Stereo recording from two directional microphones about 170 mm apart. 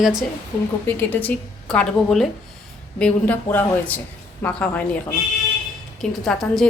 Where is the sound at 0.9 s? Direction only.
10° left (ahead or behind).